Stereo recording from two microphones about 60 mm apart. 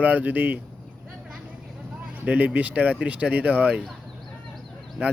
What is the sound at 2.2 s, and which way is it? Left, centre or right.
Speech, right.